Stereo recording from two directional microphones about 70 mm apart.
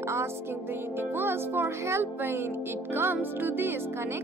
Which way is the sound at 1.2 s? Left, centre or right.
Right.